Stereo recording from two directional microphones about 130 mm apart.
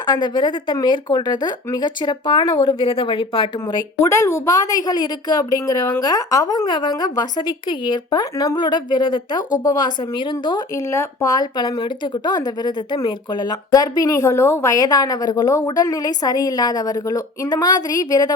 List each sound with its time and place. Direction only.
0.0 s speech: 35° left (ahead or behind)
4.0 s speech: 20° left (ahead or behind); by 10.6 s 35° left (ahead or behind)
10.8 s speech: 25° left (ahead or behind)